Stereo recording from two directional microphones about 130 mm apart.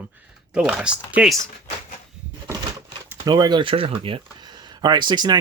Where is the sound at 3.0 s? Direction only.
30° right (ahead or behind); by 4.1 s 45° right (ahead or behind).